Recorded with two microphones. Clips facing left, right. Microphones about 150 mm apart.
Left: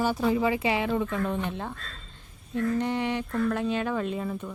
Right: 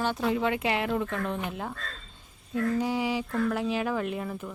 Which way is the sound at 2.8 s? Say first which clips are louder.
Even; 5° right (ahead or behind).